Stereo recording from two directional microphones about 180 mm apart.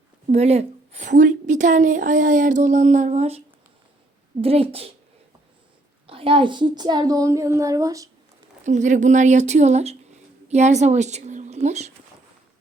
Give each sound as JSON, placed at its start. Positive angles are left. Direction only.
{"t": 0.3, "sound": "a woman's voice", "side_deg": -35}
{"t": 6.1, "sound": "a woman's voice", "side_deg": -30}
{"t": 8.6, "sound": "a woman's voice", "side_deg": -40}